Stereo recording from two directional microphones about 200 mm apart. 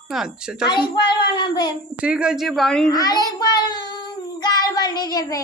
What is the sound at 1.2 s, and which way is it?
Child singing, 20° left (ahead or behind).